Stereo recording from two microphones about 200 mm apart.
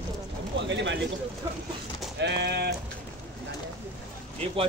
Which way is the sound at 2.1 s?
60° right (ahead or behind).